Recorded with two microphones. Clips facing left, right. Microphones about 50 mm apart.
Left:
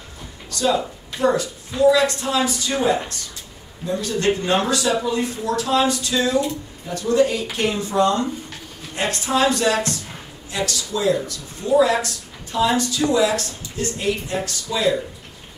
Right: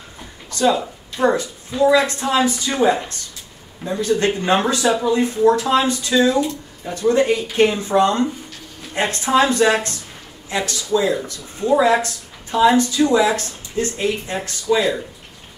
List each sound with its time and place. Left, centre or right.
0.5 s a sound: right
1.2 s speech: right
3.9 s speech: right